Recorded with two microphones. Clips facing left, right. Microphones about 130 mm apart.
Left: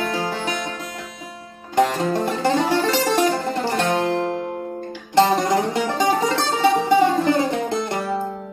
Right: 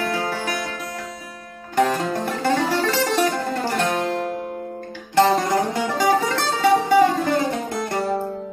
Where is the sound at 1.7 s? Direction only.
20° left (ahead or behind).